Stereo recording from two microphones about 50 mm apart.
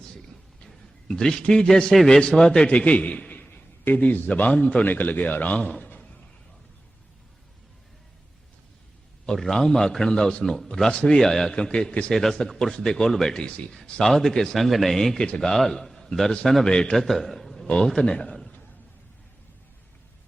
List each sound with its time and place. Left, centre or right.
0.6 s a man's voice: centre; by 3.4 s left
3.5 s a sound: left
4.4 s a man's voice: left
9.2 s a man's voice: centre
11.5 s a man's voice: centre
12.1 s a man's voice: centre
16.6 s a man's voice: centre
17.1 s a sound: centre
17.8 s a man's voice: centre